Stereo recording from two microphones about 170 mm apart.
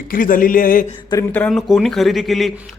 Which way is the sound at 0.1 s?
55° left (ahead or behind).